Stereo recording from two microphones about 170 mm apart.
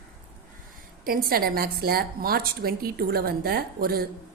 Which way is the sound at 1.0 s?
60° right (ahead or behind).